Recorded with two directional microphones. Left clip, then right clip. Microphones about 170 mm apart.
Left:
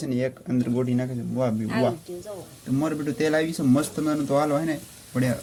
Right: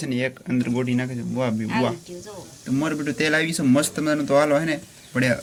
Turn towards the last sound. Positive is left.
turn(degrees=15)  # may be behind; listen again after turning